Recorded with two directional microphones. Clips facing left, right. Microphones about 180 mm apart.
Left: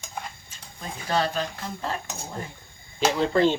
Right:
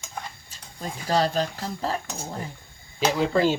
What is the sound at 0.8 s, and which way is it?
Speech, 35° right (ahead or behind).